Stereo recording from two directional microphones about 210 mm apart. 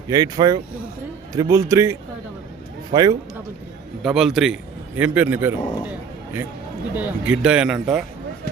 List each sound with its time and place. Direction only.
0.1 s a man's voice: 20° right (ahead or behind)
4.0 s a man's voice: centre (ahead or behind)
6.9 s speech: 5° right (ahead or behind)